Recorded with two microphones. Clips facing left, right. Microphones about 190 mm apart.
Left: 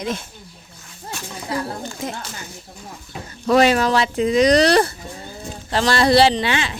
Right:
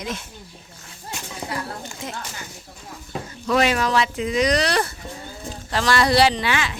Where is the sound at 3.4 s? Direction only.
35° left (ahead or behind).